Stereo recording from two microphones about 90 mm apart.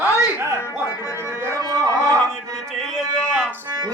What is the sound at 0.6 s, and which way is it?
Music, 35° left (ahead or behind).